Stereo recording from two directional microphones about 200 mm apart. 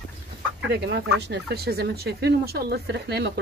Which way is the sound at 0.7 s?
55° right (ahead or behind).